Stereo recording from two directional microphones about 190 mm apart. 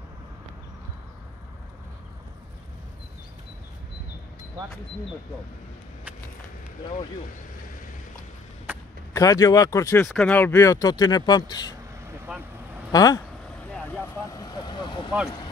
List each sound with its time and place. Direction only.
8.7 s a sound: 10° right (ahead or behind)
9.1 s speech: 20° left (ahead or behind)
12.3 s vehicle: 5° right (ahead or behind)
12.9 s speech: 20° left (ahead or behind)
13.7 s vehicle: 5° left (ahead or behind); by 15.0 s 25° left (ahead or behind)